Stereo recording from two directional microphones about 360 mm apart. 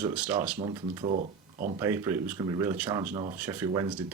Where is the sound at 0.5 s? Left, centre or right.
Centre.